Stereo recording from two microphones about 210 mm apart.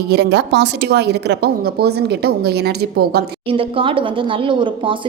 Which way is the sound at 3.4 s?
25° right (ahead or behind).